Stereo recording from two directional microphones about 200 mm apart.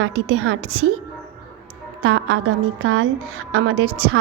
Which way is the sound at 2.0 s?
80° right.